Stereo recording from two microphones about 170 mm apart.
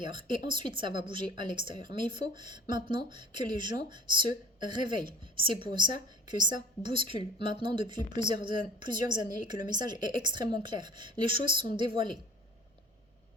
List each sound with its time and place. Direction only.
0.0 s speech: 30° right (ahead or behind)